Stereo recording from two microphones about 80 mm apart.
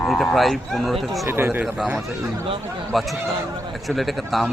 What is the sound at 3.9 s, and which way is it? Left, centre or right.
Speech, centre.